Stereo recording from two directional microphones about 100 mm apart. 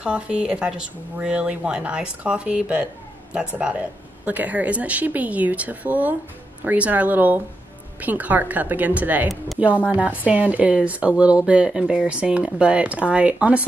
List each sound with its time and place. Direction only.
0.0 s speech: 10° right (ahead or behind)